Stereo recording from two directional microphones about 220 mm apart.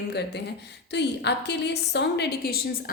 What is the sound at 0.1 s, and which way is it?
A woman's voice, 50° left (ahead or behind).